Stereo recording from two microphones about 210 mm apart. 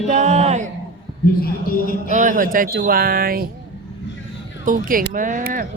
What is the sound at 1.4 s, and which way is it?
Speech, 45° left (ahead or behind).